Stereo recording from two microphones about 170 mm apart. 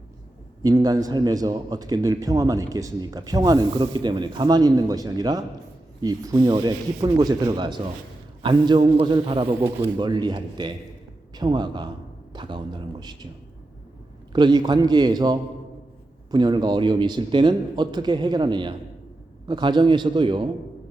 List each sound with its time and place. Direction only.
0.6 s a man's voice: 25° right (ahead or behind)
14.3 s a man's voice: 25° right (ahead or behind)